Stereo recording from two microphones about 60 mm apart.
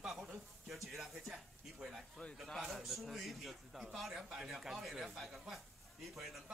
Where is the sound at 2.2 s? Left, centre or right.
Left.